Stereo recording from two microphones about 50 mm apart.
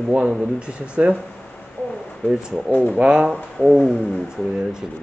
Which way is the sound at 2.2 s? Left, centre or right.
Centre.